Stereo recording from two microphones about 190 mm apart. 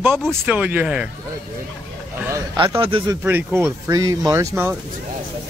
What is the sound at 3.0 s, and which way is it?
Speech, 10° right (ahead or behind).